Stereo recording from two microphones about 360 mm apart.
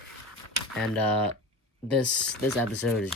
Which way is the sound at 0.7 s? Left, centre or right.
Centre.